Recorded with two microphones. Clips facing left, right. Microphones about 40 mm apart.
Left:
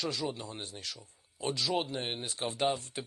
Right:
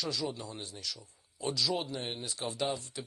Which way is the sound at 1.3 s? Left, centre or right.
Left.